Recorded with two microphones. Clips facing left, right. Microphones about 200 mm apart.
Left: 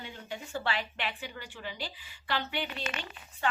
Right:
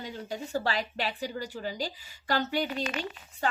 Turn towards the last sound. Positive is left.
turn(degrees=-40)  # may be behind; listen again after turning